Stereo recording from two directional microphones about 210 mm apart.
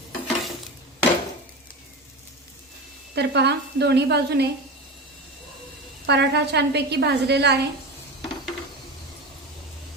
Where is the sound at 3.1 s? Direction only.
55° right (ahead or behind).